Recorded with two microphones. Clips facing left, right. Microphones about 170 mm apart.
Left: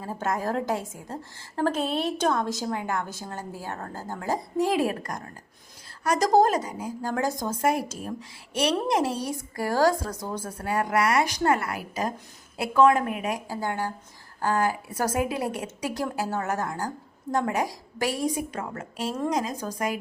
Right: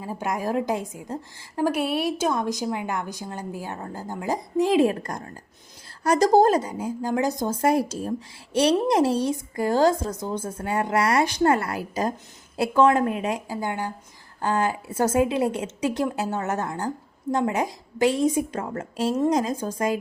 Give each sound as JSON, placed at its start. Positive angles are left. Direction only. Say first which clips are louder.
{"t": 0.0, "sound": "a woman's voice", "louder": "right 1 dB", "side_deg": -15}
{"t": 13.5, "sound": "a woman's voice", "louder": "right 1 dB", "side_deg": -20}